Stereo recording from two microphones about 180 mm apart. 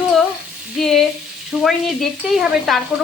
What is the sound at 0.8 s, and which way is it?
Speech, centre (ahead or behind).